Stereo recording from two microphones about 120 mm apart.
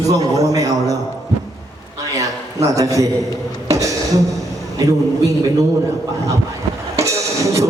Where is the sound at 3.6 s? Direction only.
25° right (ahead or behind).